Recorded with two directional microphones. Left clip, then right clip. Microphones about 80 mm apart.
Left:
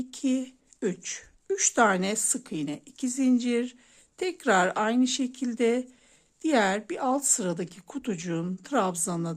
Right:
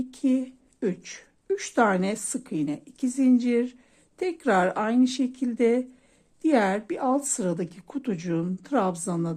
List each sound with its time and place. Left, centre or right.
0.0 s a woman's voice: left